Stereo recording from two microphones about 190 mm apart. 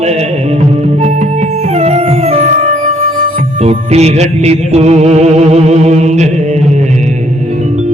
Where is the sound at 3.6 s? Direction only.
35° right (ahead or behind).